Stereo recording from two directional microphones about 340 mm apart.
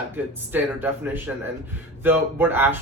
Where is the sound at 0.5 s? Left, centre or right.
Centre.